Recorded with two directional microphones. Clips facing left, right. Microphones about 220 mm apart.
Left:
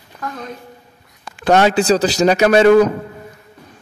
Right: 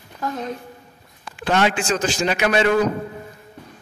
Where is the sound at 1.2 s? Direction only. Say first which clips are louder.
Left 6 dB; 45° left (ahead or behind).